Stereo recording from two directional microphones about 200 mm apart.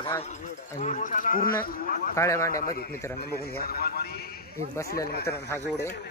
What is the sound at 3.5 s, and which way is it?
Speech, 50° left (ahead or behind).